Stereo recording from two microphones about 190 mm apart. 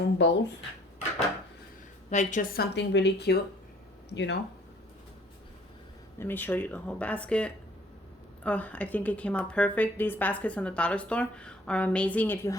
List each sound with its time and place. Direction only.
0.0 s speech: 70° left (ahead or behind)
2.0 s a woman's voice: 40° left (ahead or behind); by 4.4 s 70° left (ahead or behind)
6.1 s a woman's voice: 10° left (ahead or behind)